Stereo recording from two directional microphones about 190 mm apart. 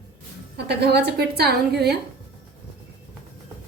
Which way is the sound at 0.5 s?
60° right (ahead or behind).